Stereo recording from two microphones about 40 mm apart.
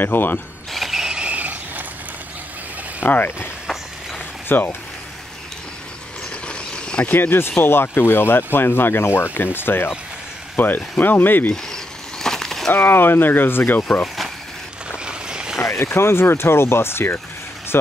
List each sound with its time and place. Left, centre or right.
0.0 s speech: left
0.7 s a sound: centre
1.3 s a sound: right
3.0 s speech: left
4.5 s speech: left
6.4 s a sound: left
7.1 s speech: left
11.5 s a sound: centre
12.7 s speech: left
14.0 s vehicle: centre
15.0 s vehicle: right
15.6 s speech: left